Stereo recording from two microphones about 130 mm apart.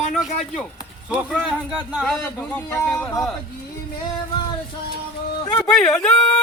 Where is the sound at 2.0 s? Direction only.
5° left (ahead or behind).